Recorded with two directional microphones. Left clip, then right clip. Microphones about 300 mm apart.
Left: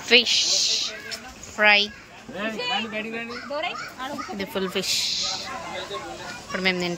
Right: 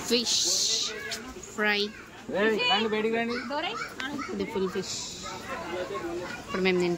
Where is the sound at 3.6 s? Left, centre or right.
Centre.